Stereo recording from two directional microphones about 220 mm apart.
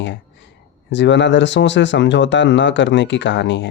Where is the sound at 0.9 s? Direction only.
55° left (ahead or behind).